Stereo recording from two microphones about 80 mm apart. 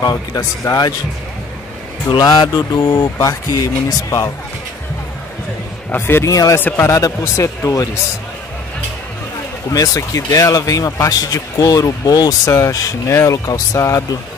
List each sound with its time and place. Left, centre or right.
0.0 s speech: left
2.0 s speech: left
5.9 s speech: left
6.3 s speech: left
9.7 s speech: left